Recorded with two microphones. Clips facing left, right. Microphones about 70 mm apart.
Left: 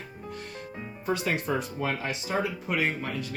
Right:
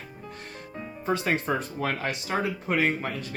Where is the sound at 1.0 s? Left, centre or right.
Right.